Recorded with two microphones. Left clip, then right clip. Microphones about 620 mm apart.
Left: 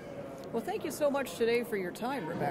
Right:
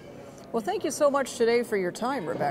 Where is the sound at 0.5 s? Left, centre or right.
Right.